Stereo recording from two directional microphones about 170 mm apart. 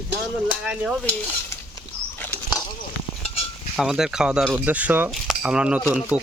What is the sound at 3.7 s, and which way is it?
Speech, centre (ahead or behind).